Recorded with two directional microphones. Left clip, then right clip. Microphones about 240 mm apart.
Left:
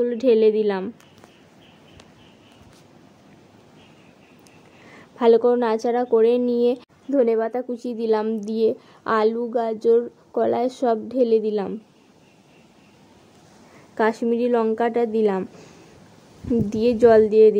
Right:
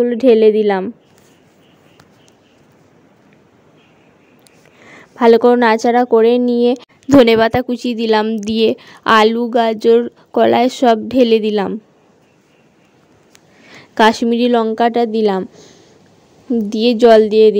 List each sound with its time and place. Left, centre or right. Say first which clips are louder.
0.0 s a woman's voice: right 7 dB; centre
4.8 s a woman's voice: right 7 dB; right
13.9 s a woman's voice: right 9 dB; right
16.6 s a woman's voice: right 6 dB; right